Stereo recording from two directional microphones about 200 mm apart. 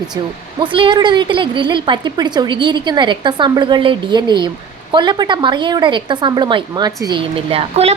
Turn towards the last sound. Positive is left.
turn(degrees=-30)  # may be behind; listen again after turning